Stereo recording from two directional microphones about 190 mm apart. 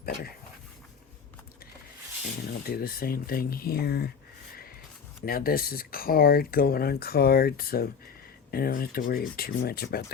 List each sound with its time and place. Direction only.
0.0 s dog: 55° left (ahead or behind)
2.5 s speech: 55° left (ahead or behind)
5.2 s speech: 50° left (ahead or behind)